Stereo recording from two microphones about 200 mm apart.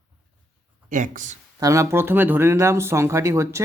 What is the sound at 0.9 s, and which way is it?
Speech, 40° right (ahead or behind).